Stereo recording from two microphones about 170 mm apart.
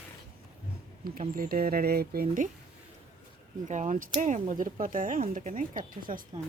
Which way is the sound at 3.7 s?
50° right (ahead or behind).